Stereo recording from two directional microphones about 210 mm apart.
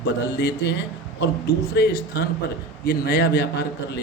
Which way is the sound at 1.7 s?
50° left (ahead or behind).